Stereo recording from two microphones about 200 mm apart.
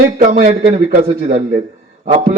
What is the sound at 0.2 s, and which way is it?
Speech, 40° right (ahead or behind).